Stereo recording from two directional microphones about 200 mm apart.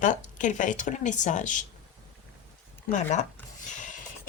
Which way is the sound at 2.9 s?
35° left (ahead or behind).